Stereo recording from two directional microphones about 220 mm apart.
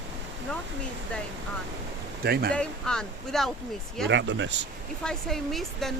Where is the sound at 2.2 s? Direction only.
45° right (ahead or behind).